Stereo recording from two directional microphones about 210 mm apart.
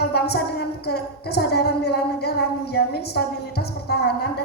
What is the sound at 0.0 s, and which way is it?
A woman's voice, 50° left (ahead or behind).